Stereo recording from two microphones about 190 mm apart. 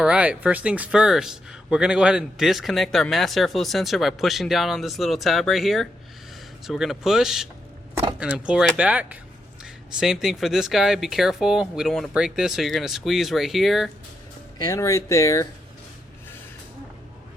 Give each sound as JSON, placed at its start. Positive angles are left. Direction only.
{"t": 0.0, "sound": "speech", "side_deg": -5}
{"t": 14.6, "sound": "speech", "side_deg": 15}